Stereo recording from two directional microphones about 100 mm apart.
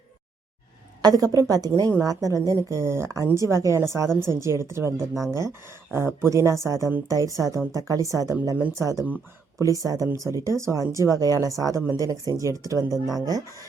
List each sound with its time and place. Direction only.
1.0 s speech: 40° right (ahead or behind)
12.9 s speech: centre (ahead or behind)